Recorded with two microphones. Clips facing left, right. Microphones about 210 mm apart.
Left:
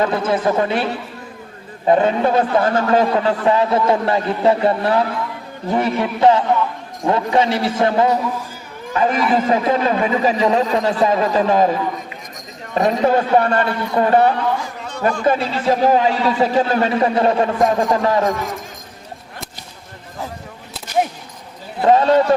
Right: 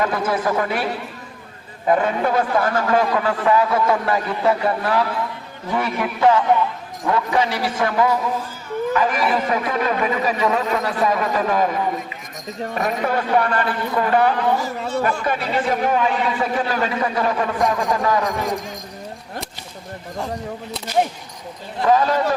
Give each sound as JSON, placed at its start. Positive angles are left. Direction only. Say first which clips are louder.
{"t": 0.0, "sound": "a man's voice", "louder": "left 3 dB", "side_deg": 25}
{"t": 1.9, "sound": "a man's voice", "louder": "left 4 dB", "side_deg": 25}
{"t": 14.6, "sound": "speech", "louder": "right 6 dB", "side_deg": -5}
{"t": 15.2, "sound": "a man's voice", "louder": "left 4 dB", "side_deg": 30}
{"t": 21.8, "sound": "a man's voice", "louder": "left 4 dB", "side_deg": 25}